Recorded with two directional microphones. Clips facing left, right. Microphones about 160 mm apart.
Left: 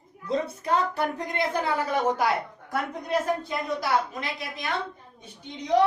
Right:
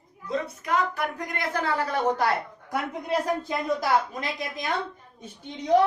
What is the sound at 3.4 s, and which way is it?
Speech, 45° right (ahead or behind).